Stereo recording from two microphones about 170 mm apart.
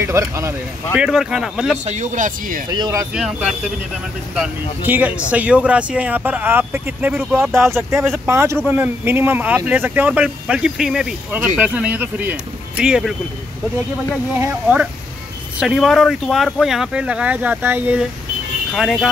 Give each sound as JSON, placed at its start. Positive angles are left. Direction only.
{"t": 0.0, "sound": "speech", "side_deg": -15}
{"t": 0.9, "sound": "speech", "side_deg": -5}
{"t": 1.9, "sound": "speech", "side_deg": -50}
{"t": 2.7, "sound": "speech", "side_deg": -20}
{"t": 3.2, "sound": "speech", "side_deg": 0}
{"t": 7.5, "sound": "speech", "side_deg": -15}
{"t": 14.4, "sound": "speech", "side_deg": -10}
{"t": 15.6, "sound": "speech", "side_deg": 0}